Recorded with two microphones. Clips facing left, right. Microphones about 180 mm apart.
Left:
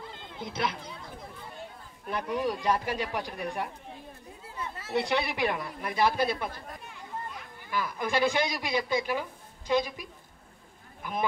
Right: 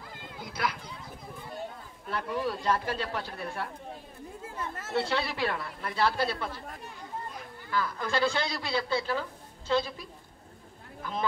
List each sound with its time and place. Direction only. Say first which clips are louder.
0.1 s a sound: left 3 dB; 25° left (ahead or behind)
2.0 s a man's voice: left 2 dB; 15° left (ahead or behind)
4.6 s chatter: even; 50° right (ahead or behind)
4.9 s a man's voice: left 2 dB; 15° left (ahead or behind)
7.7 s a man's voice: left 1 dB; 15° left (ahead or behind)